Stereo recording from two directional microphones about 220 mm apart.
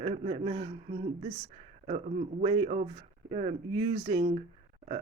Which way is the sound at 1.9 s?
35° right (ahead or behind).